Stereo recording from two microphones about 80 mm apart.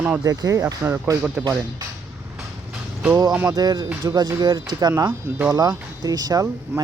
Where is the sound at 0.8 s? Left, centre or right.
Right.